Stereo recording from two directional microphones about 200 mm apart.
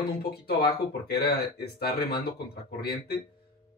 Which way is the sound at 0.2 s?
50° left (ahead or behind).